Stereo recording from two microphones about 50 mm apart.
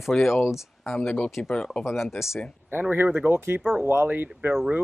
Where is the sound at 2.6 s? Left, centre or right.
Right.